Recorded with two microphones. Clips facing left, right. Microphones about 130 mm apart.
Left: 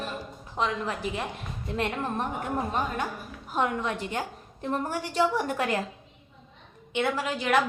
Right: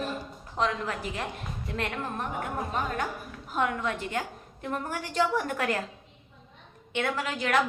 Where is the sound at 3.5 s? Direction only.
25° left (ahead or behind).